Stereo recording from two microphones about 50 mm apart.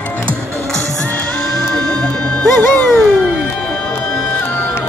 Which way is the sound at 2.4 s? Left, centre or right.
Left.